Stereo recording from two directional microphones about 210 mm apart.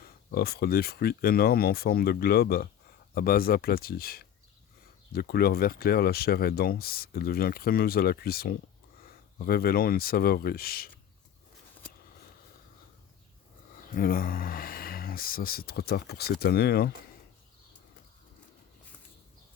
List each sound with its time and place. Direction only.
0.3 s speech: 45° left (ahead or behind)
13.9 s speech: 45° left (ahead or behind)